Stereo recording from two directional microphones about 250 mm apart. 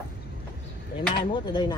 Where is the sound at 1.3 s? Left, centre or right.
Centre.